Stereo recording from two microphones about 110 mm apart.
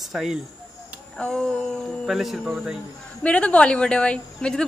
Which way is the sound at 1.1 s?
10° left (ahead or behind).